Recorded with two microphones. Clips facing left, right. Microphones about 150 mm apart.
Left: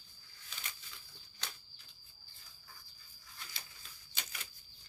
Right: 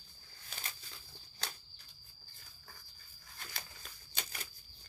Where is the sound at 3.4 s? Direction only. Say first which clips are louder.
Right 4 dB; 50° right (ahead or behind).